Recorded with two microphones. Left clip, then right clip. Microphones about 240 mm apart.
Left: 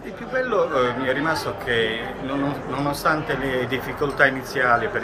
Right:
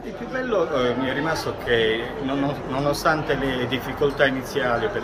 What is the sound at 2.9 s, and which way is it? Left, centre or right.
Speech, centre.